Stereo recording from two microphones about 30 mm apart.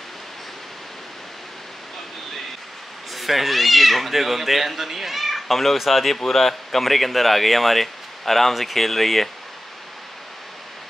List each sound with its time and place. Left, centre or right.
3.2 s speech: centre